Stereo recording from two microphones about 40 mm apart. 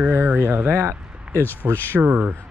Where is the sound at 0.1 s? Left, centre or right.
Right.